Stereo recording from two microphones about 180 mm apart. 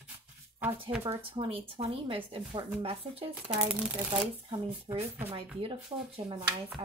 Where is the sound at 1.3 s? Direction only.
30° right (ahead or behind).